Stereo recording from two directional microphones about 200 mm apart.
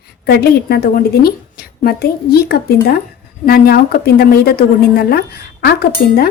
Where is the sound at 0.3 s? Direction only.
50° left (ahead or behind).